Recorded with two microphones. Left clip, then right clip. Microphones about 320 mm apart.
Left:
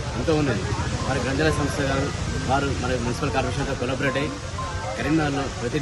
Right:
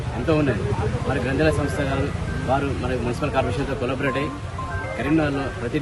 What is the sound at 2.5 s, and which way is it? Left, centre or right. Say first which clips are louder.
Speech: right 1 dB; centre.